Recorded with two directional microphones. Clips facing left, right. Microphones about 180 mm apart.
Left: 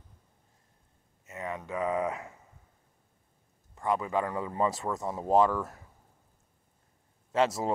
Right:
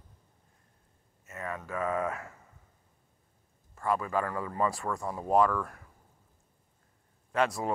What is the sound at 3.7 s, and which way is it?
Speech, 20° left (ahead or behind).